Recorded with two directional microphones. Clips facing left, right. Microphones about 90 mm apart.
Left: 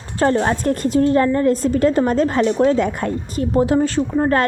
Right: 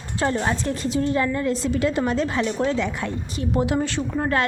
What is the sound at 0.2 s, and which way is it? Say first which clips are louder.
A woman's voice: left 6 dB; 45° left (ahead or behind).